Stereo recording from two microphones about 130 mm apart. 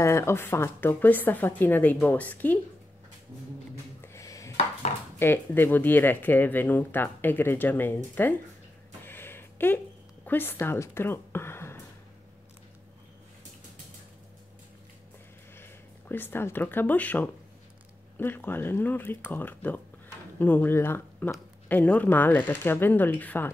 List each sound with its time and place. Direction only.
0.0 s speech: 20° left (ahead or behind)
4.0 s a sound: 20° left (ahead or behind)
5.2 s speech: 15° left (ahead or behind)
9.0 s a sound: 15° left (ahead or behind)
10.2 s speech: 15° left (ahead or behind)
15.5 s speech: 15° left (ahead or behind)